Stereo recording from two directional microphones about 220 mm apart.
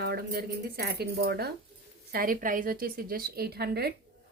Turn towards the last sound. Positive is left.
turn(degrees=-45)  # may be behind; listen again after turning